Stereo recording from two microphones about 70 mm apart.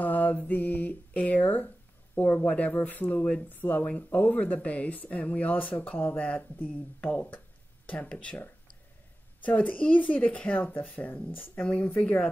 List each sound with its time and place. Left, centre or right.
0.0 s mantra: left
2.1 s speech: left